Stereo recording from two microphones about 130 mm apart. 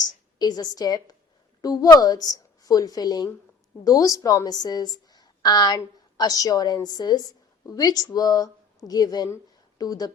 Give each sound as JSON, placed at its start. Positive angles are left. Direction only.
{"t": 0.0, "sound": "a woman's voice", "side_deg": 30}